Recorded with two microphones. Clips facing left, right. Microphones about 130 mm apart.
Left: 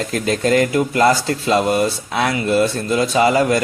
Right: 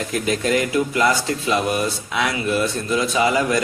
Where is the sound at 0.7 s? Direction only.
35° left (ahead or behind).